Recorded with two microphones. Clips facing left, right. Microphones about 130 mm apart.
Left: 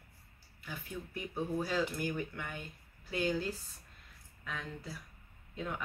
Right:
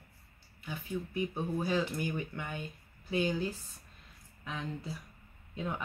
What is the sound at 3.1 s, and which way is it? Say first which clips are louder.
Speech: right 2 dB; 15° right (ahead or behind).